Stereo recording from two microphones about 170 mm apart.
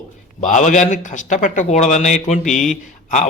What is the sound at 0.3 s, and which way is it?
A man's voice, 45° left (ahead or behind).